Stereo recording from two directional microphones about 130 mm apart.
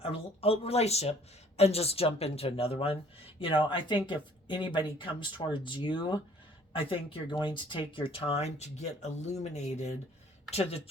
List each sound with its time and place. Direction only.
0.0 s speech: 45° left (ahead or behind)
10.5 s speech: 50° left (ahead or behind)